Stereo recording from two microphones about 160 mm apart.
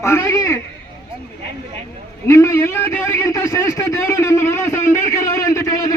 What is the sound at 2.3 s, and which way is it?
A man's voice, 20° left (ahead or behind).